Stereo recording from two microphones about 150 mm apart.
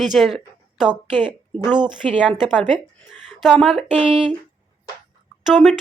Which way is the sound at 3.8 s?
40° right (ahead or behind).